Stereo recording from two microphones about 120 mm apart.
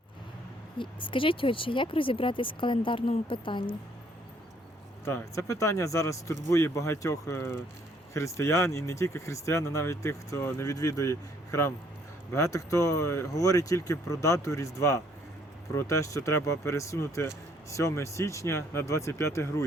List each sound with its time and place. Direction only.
0.8 s speech: 45° left (ahead or behind)
5.0 s speech: 20° left (ahead or behind)